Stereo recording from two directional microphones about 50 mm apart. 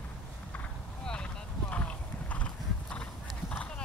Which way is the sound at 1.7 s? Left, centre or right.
Left.